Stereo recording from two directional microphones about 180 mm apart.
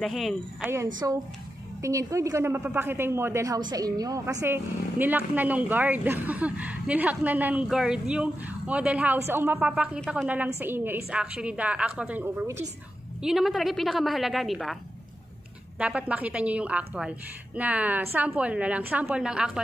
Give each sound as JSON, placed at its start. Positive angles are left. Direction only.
{"t": 0.0, "sound": "a woman's voice", "side_deg": 0}
{"t": 1.0, "sound": "a woman's voice", "side_deg": -15}
{"t": 10.6, "sound": "a woman's voice", "side_deg": -10}
{"t": 15.8, "sound": "a woman's voice", "side_deg": -5}